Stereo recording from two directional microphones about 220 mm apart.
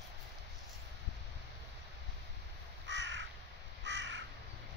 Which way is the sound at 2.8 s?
55° right (ahead or behind).